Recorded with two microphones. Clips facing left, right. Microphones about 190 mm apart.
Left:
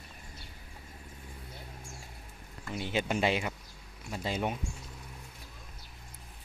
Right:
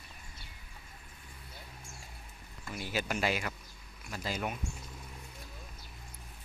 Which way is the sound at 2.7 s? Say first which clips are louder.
Left 4 dB; 25° left (ahead or behind).